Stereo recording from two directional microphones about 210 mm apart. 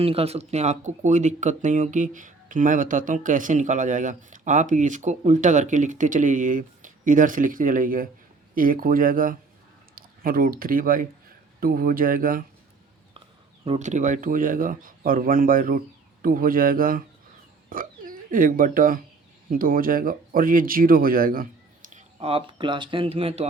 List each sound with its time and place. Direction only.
0.0 s speech: 25° right (ahead or behind)
13.7 s speech: 35° right (ahead or behind)
21.9 s speech: 30° right (ahead or behind)